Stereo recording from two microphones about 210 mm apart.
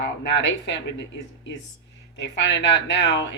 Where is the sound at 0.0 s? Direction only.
60° left (ahead or behind).